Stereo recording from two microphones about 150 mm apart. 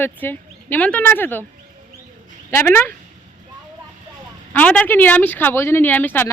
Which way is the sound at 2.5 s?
15° left (ahead or behind).